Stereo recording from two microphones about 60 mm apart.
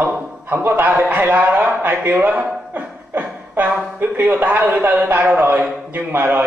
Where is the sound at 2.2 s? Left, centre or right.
Right.